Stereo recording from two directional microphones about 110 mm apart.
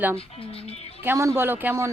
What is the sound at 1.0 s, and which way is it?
Speech, 25° right (ahead or behind).